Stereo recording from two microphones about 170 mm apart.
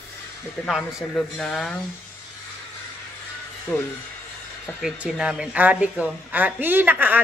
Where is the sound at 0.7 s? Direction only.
5° right (ahead or behind).